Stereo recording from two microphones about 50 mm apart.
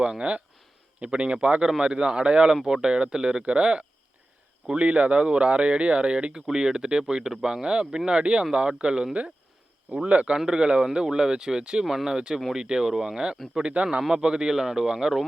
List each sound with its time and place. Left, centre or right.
0.0 s speech: right
10.3 s speech: centre